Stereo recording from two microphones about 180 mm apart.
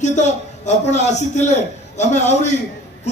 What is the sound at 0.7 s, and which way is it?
A man's voice, 40° left (ahead or behind).